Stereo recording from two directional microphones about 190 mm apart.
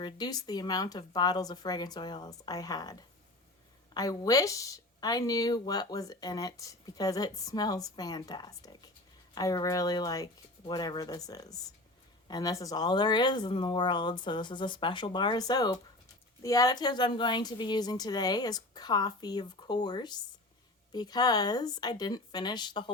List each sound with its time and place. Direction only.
0.0 s speech: 20° left (ahead or behind)